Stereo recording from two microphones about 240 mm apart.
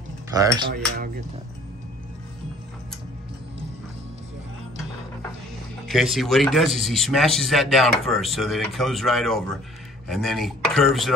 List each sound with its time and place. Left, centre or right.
0.4 s dishes: centre
5.9 s speech: centre